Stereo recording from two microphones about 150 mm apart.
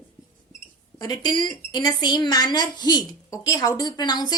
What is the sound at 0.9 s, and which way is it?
Speech, 25° left (ahead or behind).